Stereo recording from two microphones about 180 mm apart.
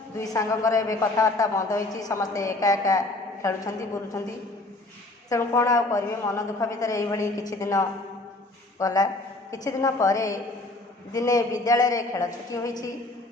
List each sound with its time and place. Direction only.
0.2 s a woman's voice: 20° left (ahead or behind)
5.3 s a woman's voice: 15° left (ahead or behind)